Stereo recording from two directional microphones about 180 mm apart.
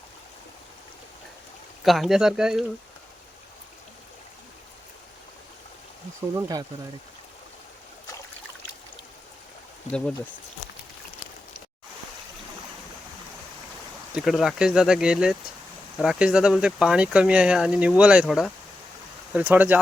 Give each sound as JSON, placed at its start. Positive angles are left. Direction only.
{"t": 1.8, "sound": "speech", "side_deg": 0}
{"t": 6.3, "sound": "speech", "side_deg": -20}
{"t": 14.2, "sound": "speech", "side_deg": 0}